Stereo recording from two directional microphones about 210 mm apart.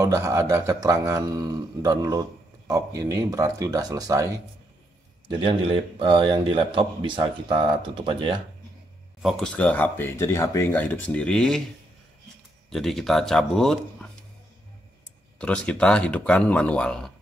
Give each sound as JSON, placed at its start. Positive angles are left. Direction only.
{"t": 0.0, "sound": "a man's voice", "side_deg": -15}
{"t": 5.3, "sound": "speech", "side_deg": -25}
{"t": 9.2, "sound": "speech", "side_deg": 5}
{"t": 12.6, "sound": "speech", "side_deg": 0}
{"t": 15.3, "sound": "speech", "side_deg": 5}